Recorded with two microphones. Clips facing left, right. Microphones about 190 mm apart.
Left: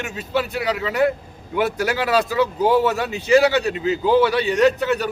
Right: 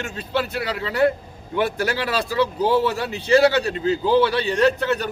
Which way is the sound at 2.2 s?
15° left (ahead or behind).